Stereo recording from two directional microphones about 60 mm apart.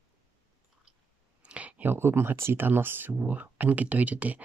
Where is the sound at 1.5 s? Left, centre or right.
Right.